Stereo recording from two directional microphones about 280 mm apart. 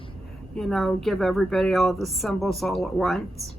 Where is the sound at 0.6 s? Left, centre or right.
Centre.